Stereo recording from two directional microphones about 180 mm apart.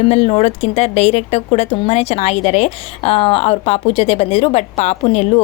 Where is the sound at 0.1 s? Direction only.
35° left (ahead or behind).